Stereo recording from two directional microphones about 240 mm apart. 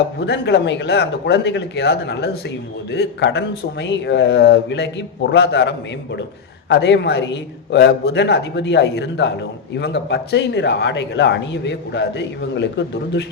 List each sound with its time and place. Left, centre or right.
0.2 s a man's voice: left